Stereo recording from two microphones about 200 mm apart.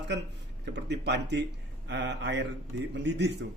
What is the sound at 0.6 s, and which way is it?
Speech, 60° right (ahead or behind).